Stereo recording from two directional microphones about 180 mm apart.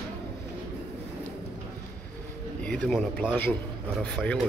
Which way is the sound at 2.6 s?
5° left (ahead or behind).